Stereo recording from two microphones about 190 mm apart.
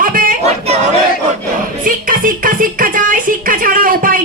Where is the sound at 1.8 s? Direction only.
45° right (ahead or behind).